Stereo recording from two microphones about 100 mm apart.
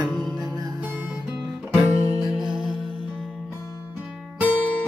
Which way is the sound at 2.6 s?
50° left (ahead or behind).